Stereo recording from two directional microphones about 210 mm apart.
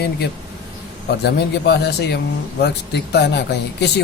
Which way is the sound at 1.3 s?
50° left (ahead or behind).